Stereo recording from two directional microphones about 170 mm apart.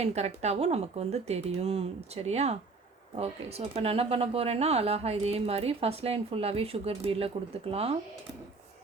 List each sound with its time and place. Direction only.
0.0 s speech: 40° right (ahead or behind)